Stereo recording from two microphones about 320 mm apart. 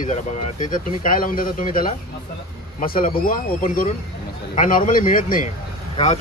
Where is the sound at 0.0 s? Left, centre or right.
Left.